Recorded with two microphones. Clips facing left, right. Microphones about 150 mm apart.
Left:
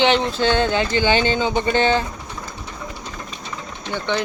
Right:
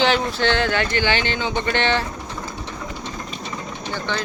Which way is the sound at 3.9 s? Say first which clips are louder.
Left 4 dB; 20° left (ahead or behind).